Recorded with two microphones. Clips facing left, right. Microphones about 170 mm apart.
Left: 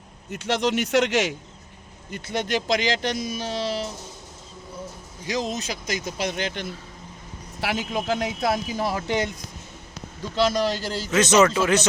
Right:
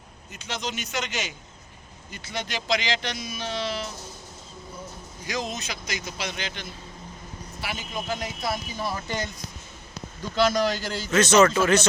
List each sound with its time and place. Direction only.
0.3 s speech: 70° left (ahead or behind)
2.0 s speech: 55° left (ahead or behind); by 3.8 s 35° left (ahead or behind)
5.2 s speech: 35° left (ahead or behind); by 6.7 s 55° left (ahead or behind)
7.6 s a man's voice: 90° left; by 9.4 s 60° left (ahead or behind)
10.3 s a man's voice: 30° left (ahead or behind)
11.1 s speech: 20° left (ahead or behind)